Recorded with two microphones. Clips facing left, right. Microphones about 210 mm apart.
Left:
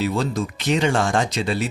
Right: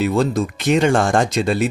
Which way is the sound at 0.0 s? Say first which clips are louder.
Right 5 dB; 50° right (ahead or behind).